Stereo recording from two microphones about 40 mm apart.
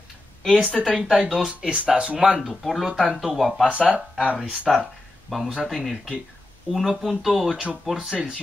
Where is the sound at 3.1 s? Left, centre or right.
Centre.